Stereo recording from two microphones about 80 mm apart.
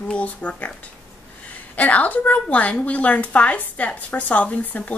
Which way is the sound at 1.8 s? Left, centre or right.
Centre.